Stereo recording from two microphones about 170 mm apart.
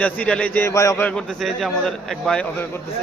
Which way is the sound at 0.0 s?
10° left (ahead or behind).